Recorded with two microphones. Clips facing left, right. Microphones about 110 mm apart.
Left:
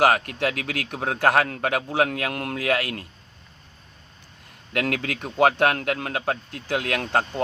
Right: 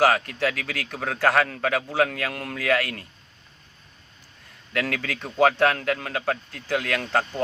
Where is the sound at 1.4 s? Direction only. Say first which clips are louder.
Even; 40° left (ahead or behind).